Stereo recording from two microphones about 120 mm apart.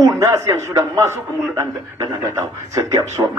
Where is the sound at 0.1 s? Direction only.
25° right (ahead or behind).